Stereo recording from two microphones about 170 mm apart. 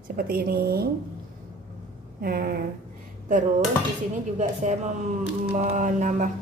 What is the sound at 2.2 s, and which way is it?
Speech, 60° right (ahead or behind).